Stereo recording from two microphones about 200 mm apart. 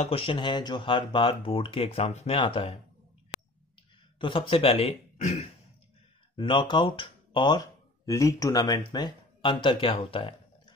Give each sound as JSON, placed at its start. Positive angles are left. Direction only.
{"t": 0.0, "sound": "speech", "side_deg": 30}
{"t": 4.2, "sound": "speech", "side_deg": 25}